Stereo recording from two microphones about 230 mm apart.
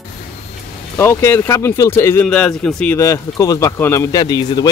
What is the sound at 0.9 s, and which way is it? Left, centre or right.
Speech, centre.